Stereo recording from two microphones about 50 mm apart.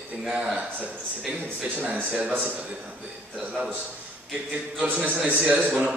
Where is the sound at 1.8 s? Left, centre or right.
Right.